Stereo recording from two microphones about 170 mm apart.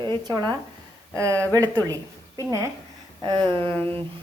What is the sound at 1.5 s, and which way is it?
A woman's voice, 20° right (ahead or behind).